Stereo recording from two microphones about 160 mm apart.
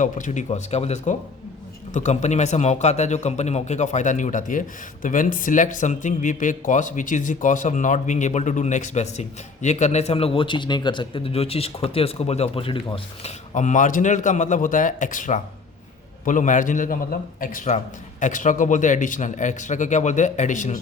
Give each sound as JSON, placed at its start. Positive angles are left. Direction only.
{"t": 0.0, "sound": "a man's voice", "side_deg": 50}